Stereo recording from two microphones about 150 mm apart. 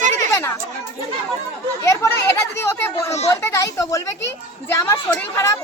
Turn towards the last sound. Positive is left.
turn(degrees=20)  # may be behind; listen again after turning